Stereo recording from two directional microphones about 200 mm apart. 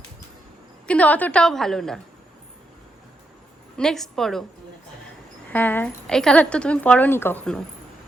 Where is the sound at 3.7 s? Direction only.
Centre (ahead or behind).